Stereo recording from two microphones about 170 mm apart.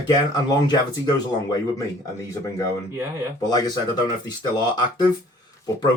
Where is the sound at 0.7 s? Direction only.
20° left (ahead or behind).